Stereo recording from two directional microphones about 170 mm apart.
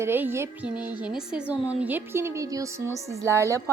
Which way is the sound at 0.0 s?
15° right (ahead or behind).